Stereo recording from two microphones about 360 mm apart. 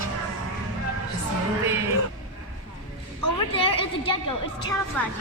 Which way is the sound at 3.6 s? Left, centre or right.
Centre.